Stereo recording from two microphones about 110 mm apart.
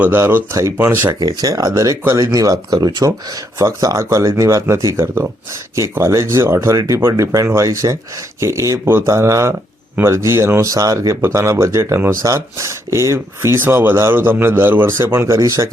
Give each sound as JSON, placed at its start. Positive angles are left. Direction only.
{"t": 0.0, "sound": "speech", "side_deg": -20}
{"t": 1.2, "sound": "speech", "side_deg": -35}